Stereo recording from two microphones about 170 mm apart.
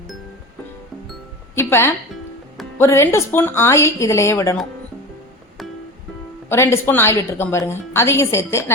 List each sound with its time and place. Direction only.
1.5 s a woman's voice: 15° left (ahead or behind)
6.5 s a woman's voice: 15° left (ahead or behind)